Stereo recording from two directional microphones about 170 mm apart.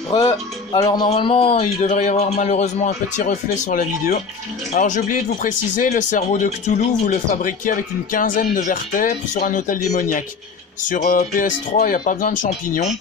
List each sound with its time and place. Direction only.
0.1 s speech: 20° left (ahead or behind)
1.8 s speech: 45° left (ahead or behind)